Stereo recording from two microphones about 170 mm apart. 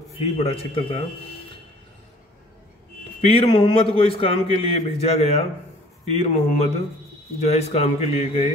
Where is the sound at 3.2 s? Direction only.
35° left (ahead or behind).